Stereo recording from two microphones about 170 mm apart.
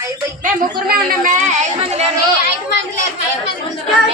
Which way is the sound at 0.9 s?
50° right (ahead or behind).